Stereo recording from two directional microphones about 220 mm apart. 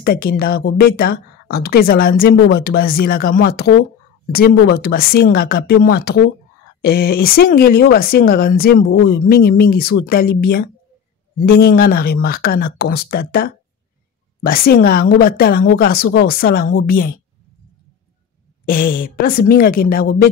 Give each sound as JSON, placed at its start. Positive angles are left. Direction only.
{"t": 0.0, "sound": "speech", "side_deg": 45}
{"t": 18.7, "sound": "a woman's voice", "side_deg": 40}